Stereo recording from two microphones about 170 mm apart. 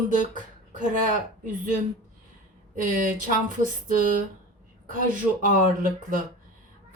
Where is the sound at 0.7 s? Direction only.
50° right (ahead or behind).